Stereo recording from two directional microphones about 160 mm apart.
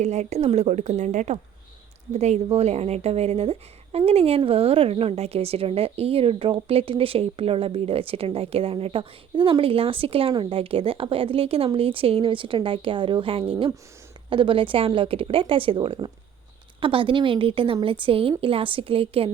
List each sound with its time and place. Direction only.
0.0 s a woman's voice: 45° right (ahead or behind)